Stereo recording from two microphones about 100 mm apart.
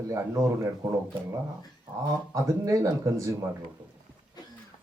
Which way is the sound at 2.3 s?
30° right (ahead or behind).